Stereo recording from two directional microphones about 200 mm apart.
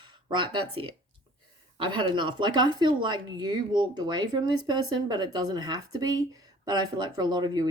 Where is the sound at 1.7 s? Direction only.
25° right (ahead or behind).